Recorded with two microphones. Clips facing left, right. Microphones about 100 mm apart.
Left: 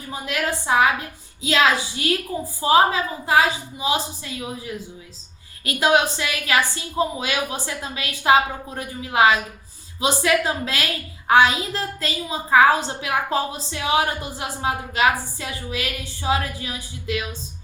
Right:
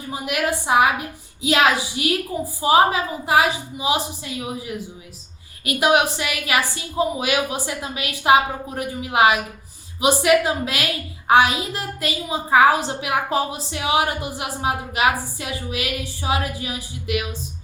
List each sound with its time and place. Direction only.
0.1 s a woman's voice: 20° right (ahead or behind)